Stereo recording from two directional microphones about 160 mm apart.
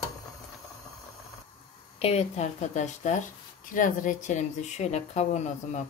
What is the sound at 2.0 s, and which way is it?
Speech, 40° left (ahead or behind).